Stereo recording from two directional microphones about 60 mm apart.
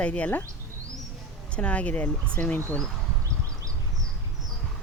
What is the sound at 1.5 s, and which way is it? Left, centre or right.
Speech, left.